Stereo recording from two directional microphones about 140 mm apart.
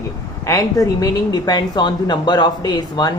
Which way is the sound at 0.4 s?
25° left (ahead or behind).